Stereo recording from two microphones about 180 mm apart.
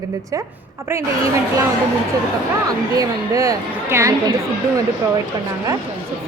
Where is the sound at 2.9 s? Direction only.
20° right (ahead or behind).